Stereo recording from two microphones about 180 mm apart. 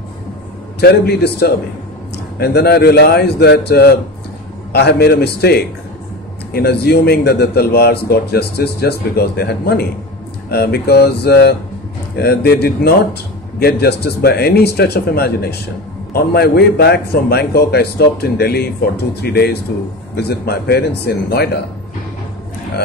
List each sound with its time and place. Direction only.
0.7 s a man's voice: 65° left (ahead or behind)